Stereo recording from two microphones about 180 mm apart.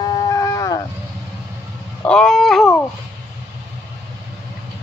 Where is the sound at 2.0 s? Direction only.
5° left (ahead or behind).